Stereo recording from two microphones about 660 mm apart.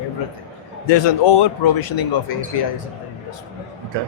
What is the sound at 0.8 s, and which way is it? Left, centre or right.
Speech, left.